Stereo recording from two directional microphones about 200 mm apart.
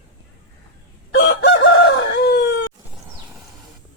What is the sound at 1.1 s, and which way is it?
Chicken, 65° left (ahead or behind).